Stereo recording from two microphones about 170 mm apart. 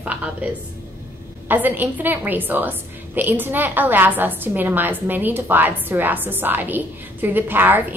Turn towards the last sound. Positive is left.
turn(degrees=-10)  # may be behind; listen again after turning